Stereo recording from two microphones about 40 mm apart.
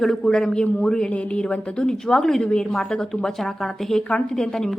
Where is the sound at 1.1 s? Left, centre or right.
Left.